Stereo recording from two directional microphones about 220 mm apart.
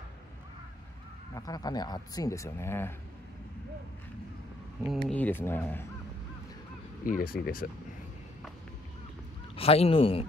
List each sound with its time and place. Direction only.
1.3 s speech: 15° left (ahead or behind)
4.8 s speech: 5° left (ahead or behind)
7.1 s speech: 40° left (ahead or behind)
9.6 s speech: 25° left (ahead or behind)